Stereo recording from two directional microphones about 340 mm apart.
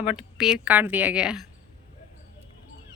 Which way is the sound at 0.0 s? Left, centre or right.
Centre.